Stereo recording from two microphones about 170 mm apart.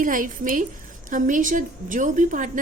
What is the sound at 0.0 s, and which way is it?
A woman's voice, 50° right (ahead or behind).